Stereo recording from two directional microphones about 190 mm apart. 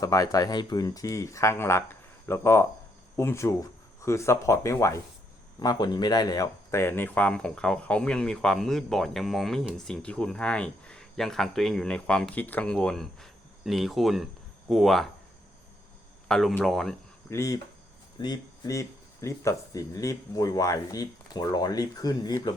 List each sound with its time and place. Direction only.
0.0 s speech: 20° left (ahead or behind); by 15.1 s centre (ahead or behind)
16.3 s speech: centre (ahead or behind)
17.2 s speech: 15° left (ahead or behind)